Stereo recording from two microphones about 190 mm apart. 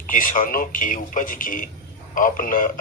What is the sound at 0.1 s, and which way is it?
A man's voice, 45° left (ahead or behind).